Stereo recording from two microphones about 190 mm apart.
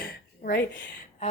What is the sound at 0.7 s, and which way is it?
Speech, 70° left (ahead or behind).